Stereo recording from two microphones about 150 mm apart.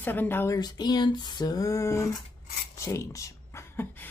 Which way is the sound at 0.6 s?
25° left (ahead or behind).